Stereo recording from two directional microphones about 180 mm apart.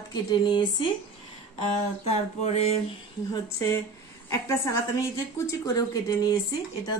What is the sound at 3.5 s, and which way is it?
Speech, 15° left (ahead or behind).